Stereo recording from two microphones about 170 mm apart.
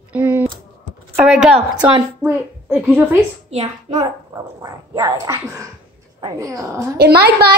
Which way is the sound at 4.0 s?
20° right (ahead or behind).